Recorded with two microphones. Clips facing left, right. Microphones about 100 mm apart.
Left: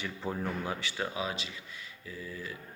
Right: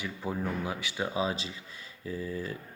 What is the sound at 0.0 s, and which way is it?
Speech, 10° right (ahead or behind).